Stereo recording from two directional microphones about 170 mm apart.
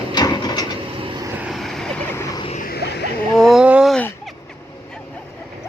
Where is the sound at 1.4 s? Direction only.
Centre (ahead or behind).